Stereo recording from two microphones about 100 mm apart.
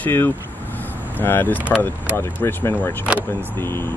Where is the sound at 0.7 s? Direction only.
20° left (ahead or behind).